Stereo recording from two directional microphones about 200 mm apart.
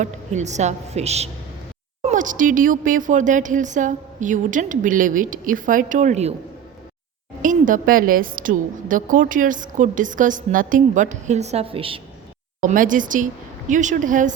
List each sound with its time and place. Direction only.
0.0 s a woman's voice: 35° right (ahead or behind)
7.4 s a woman's voice: 40° right (ahead or behind)
12.5 s a woman's voice: 40° right (ahead or behind)